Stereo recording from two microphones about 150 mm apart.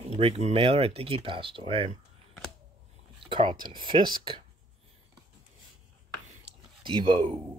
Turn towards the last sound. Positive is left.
turn(degrees=-35)  # may be behind; listen again after turning